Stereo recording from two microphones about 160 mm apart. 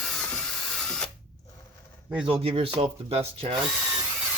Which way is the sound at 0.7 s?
5° left (ahead or behind).